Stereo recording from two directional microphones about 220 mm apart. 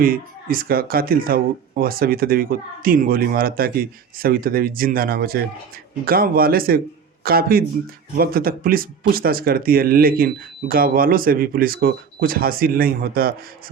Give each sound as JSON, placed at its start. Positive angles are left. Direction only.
{"t": 0.0, "sound": "speech", "side_deg": -40}